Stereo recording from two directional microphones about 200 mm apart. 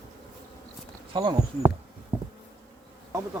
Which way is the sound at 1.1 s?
25° right (ahead or behind).